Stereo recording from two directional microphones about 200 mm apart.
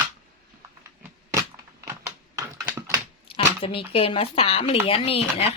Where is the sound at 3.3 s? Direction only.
25° left (ahead or behind).